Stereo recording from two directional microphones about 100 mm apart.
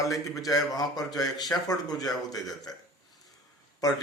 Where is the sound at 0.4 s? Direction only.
40° left (ahead or behind).